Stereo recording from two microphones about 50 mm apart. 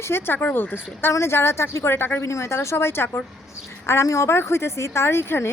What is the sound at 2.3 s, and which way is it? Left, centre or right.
Speech, left.